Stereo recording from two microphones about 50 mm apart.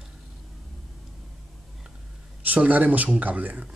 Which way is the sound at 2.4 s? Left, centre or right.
Right.